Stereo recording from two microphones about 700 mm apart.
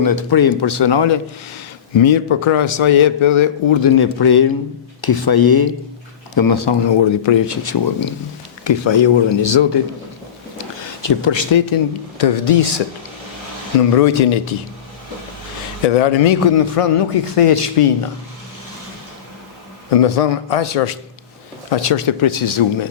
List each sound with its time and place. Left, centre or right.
0.0 s a man's voice: left
13.7 s a man's voice: left
15.9 s a man's voice: left
19.9 s a man's voice: left